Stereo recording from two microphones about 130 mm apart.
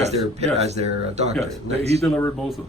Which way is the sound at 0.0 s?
55° right (ahead or behind).